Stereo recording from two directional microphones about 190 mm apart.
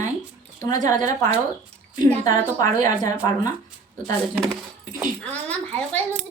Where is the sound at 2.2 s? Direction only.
20° left (ahead or behind).